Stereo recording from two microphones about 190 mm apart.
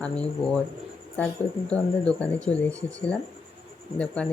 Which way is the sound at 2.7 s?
15° right (ahead or behind).